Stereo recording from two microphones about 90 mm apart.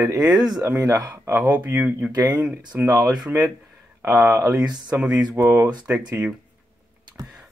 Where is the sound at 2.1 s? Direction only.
50° right (ahead or behind).